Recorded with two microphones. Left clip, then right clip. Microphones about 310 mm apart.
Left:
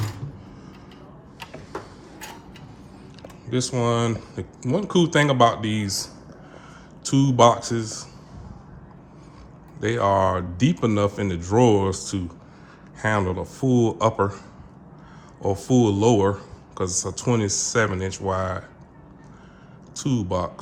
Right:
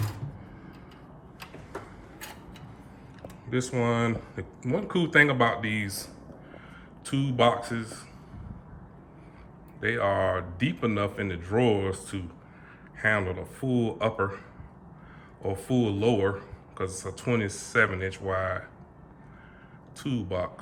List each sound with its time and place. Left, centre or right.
1.4 s tick-tock: centre
3.2 s a man's voice: centre
9.8 s a man's voice: centre
14.0 s a man's voice: centre
15.4 s a man's voice: centre
20.0 s a man's voice: centre